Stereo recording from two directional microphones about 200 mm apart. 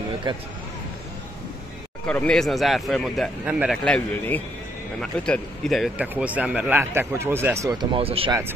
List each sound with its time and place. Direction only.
2.0 s speech: 5° left (ahead or behind); by 7.7 s 15° right (ahead or behind)
7.9 s speech: 30° right (ahead or behind)